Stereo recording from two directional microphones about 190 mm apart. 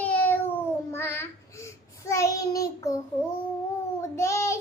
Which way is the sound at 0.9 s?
10° left (ahead or behind).